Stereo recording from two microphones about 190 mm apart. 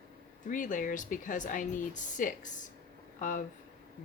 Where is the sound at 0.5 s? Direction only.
45° left (ahead or behind).